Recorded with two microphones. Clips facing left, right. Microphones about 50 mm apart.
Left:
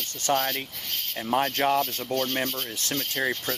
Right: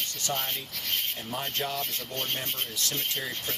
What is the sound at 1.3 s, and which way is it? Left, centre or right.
Speech, left.